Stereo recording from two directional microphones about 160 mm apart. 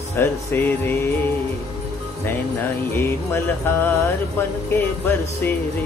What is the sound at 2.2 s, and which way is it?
Mantra, 15° left (ahead or behind).